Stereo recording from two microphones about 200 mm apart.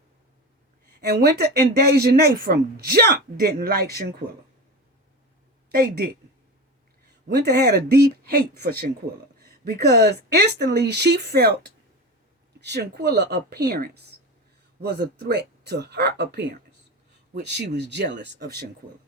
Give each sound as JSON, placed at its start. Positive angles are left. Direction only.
{"t": 1.0, "sound": "speech", "side_deg": -55}
{"t": 5.7, "sound": "speech", "side_deg": -50}
{"t": 7.3, "sound": "speech", "side_deg": -55}